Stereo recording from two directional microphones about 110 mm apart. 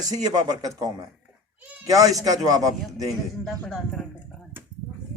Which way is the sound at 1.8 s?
35° right (ahead or behind).